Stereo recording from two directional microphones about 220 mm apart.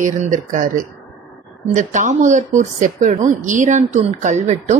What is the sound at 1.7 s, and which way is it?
A woman's voice, 35° right (ahead or behind).